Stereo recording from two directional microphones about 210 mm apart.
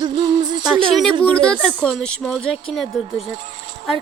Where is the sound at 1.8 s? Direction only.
Centre (ahead or behind).